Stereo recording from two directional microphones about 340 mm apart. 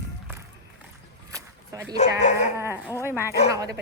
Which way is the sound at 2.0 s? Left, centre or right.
Left.